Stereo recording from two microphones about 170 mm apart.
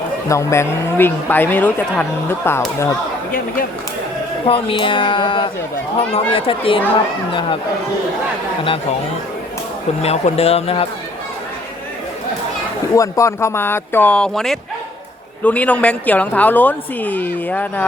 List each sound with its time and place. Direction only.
0.3 s a woman's voice: 15° left (ahead or behind)
3.3 s speech: 60° left (ahead or behind)
4.4 s speech: 30° left (ahead or behind)
10.0 s speech: 40° left (ahead or behind)
12.9 s a woman's voice: 20° left (ahead or behind)